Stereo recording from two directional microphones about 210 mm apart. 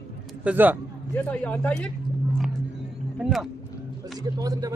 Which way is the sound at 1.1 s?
5° left (ahead or behind).